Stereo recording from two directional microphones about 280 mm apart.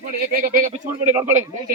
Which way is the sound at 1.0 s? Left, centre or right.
Centre.